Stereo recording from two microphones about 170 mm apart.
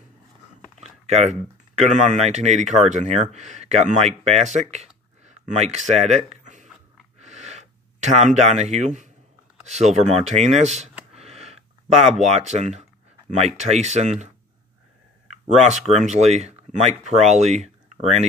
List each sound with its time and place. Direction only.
0.7 s speech: 40° right (ahead or behind)
7.2 s gasp: 40° right (ahead or behind)
9.7 s speech: 45° right (ahead or behind)
11.2 s a sound: 40° right (ahead or behind)
12.2 s speech: 40° right (ahead or behind)